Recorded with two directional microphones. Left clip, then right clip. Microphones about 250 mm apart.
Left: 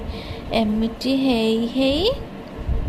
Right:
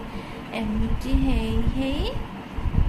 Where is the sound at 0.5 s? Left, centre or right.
Left.